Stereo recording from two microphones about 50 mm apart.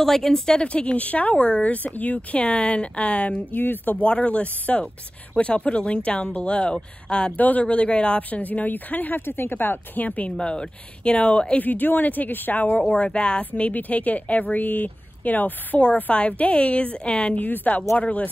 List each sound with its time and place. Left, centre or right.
0.0 s a woman's voice: centre
0.7 s speech: left
3.5 s speech: left
4.0 s speech: left
7.3 s speech: left
10.3 s speech: centre
11.6 s speech: left